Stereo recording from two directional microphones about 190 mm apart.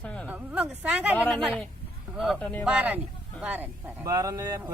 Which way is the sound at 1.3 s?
Centre (ahead or behind).